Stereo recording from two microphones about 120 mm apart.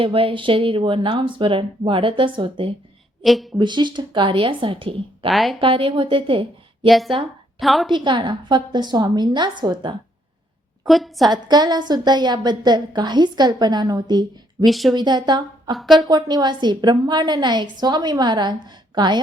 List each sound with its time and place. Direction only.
0.0 s speech: 45° right (ahead or behind)
3.2 s a woman's voice: centre (ahead or behind)
3.6 s speech: 40° right (ahead or behind)
5.3 s a woman's voice: centre (ahead or behind)
5.5 s speech: 45° right (ahead or behind)
6.8 s a woman's voice: centre (ahead or behind)
7.9 s a woman's voice: 40° right (ahead or behind)
10.8 s a woman's voice: centre (ahead or behind)
11.3 s a woman's voice: 35° right (ahead or behind)
14.6 s a woman's voice: centre (ahead or behind)
14.9 s a woman's voice: 40° right (ahead or behind)
15.7 s a woman's voice: centre (ahead or behind)
16.0 s a woman's voice: 35° right (ahead or behind)